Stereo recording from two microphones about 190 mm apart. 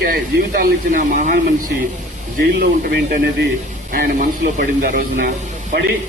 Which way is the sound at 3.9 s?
50° right (ahead or behind).